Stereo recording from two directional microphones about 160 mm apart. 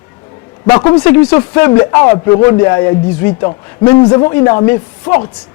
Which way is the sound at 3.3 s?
30° left (ahead or behind).